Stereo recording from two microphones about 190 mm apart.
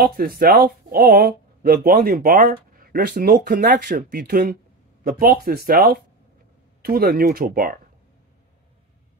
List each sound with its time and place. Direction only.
0.0 s speech: 50° right (ahead or behind)